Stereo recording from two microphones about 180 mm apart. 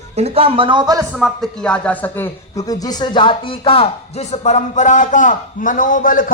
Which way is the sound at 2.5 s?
20° left (ahead or behind).